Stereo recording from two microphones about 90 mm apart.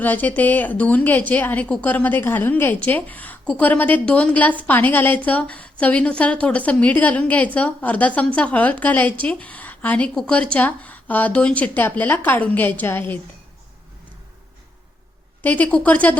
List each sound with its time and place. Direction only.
0.0 s a woman's voice: 20° left (ahead or behind)
15.4 s a woman's voice: 15° left (ahead or behind)